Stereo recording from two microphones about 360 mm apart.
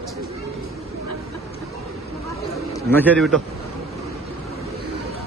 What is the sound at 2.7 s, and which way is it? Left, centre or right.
Speech, centre.